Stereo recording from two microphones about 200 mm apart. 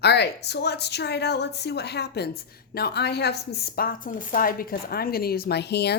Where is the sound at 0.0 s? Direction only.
55° left (ahead or behind).